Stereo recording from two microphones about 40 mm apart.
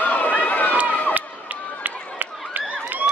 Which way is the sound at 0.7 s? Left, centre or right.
Right.